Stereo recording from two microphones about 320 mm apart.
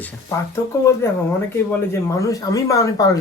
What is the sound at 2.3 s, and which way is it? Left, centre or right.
Speech, centre.